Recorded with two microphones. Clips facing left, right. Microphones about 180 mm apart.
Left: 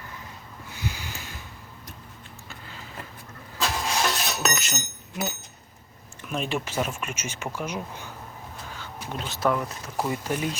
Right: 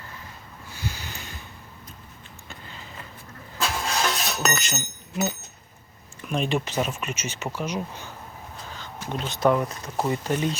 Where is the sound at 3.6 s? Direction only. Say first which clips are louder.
Even; 5° left (ahead or behind).